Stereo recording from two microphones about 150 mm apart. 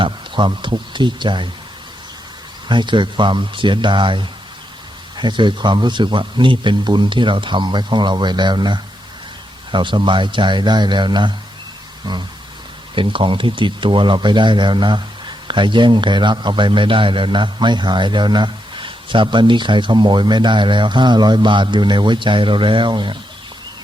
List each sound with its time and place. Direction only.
0.0 s a man's voice: 30° right (ahead or behind)
2.6 s a man's voice: 30° right (ahead or behind)
12.9 s a man's voice: 35° right (ahead or behind)